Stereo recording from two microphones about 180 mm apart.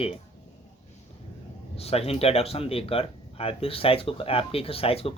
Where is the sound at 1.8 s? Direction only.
35° left (ahead or behind).